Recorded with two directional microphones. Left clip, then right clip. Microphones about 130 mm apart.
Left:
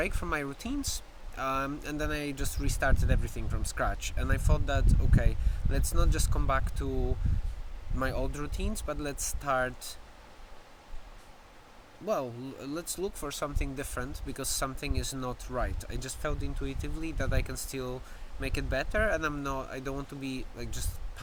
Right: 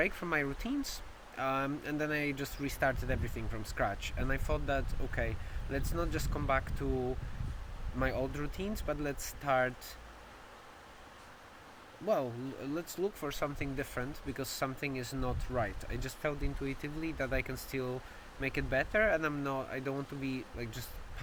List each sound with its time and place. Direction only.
0.0 s speech: 15° left (ahead or behind)
7.9 s speech: 20° left (ahead or behind)
12.0 s speech: 15° left (ahead or behind)